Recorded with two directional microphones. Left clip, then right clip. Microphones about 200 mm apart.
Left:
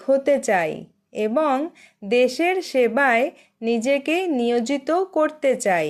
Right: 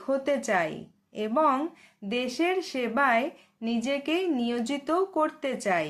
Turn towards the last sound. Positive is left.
turn(degrees=35)  # may be behind; listen again after turning